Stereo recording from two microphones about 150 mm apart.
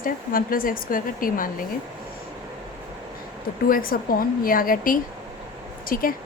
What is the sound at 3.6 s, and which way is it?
A woman's voice, 75° left (ahead or behind).